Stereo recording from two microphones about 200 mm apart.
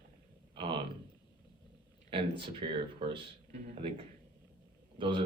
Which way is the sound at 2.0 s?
25° right (ahead or behind).